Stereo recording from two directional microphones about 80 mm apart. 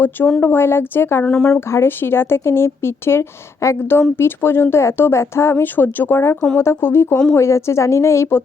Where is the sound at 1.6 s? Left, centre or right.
Left.